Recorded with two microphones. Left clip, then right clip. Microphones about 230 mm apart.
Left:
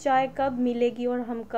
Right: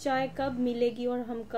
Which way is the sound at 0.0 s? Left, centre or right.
Left.